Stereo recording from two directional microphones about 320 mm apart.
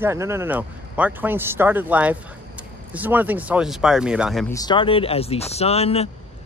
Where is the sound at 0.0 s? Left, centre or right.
Centre.